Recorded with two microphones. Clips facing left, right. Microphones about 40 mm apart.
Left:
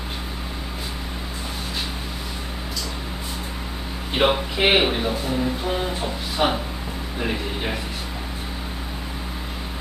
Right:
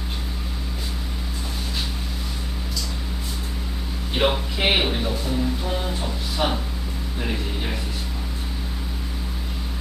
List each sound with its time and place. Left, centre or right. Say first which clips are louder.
4.1 s speech: left 2 dB; centre